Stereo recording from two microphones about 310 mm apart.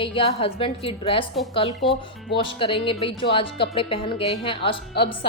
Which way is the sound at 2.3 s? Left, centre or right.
Centre.